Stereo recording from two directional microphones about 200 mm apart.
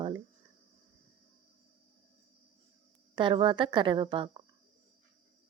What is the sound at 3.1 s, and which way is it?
Speech, 25° right (ahead or behind).